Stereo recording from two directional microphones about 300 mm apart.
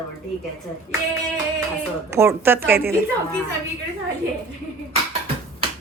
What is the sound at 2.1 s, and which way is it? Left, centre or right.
Speech, centre.